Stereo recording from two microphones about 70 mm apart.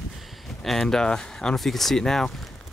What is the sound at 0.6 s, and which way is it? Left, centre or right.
Speech, centre.